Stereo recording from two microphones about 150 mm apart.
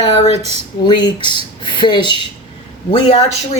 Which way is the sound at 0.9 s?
30° left (ahead or behind).